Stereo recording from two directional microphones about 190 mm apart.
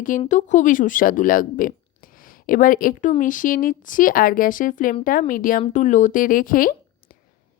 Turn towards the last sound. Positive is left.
turn(degrees=45)  # may be behind; listen again after turning